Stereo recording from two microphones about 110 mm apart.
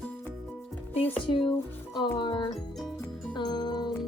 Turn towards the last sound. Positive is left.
turn(degrees=40)  # may be behind; listen again after turning